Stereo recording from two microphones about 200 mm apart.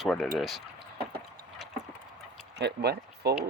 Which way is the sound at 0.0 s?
Centre (ahead or behind).